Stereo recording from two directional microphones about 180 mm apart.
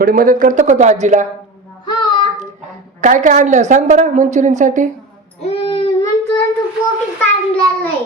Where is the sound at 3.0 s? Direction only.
45° right (ahead or behind).